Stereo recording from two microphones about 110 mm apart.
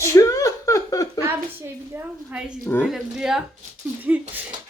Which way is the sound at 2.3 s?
10° right (ahead or behind).